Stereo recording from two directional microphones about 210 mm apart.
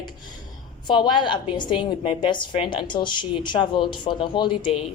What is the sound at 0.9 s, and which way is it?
A woman's voice, 20° left (ahead or behind).